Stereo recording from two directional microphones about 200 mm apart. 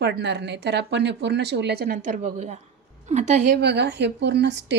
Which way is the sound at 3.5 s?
55° right (ahead or behind).